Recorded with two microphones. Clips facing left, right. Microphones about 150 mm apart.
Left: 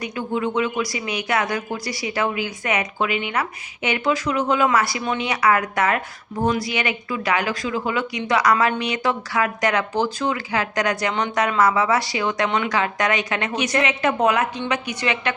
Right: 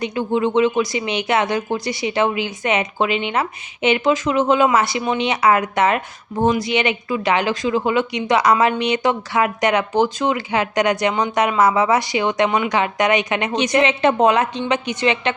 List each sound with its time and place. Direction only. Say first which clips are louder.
0.0 s speech: right 5 dB; 25° right (ahead or behind)